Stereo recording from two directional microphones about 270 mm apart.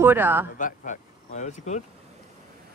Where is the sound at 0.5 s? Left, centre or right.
Left.